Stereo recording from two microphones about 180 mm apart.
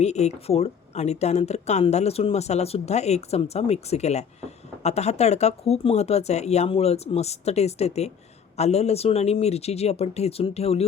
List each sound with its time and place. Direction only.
0.0 s speech: 40° left (ahead or behind)